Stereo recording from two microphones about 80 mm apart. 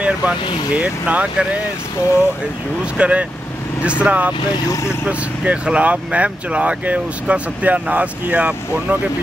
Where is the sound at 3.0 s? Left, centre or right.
Centre.